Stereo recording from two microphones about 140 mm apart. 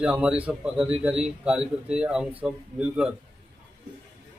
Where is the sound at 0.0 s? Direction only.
5° right (ahead or behind).